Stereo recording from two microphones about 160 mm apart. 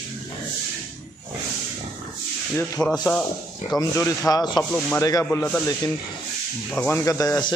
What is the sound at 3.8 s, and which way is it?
A man's voice, 20° left (ahead or behind).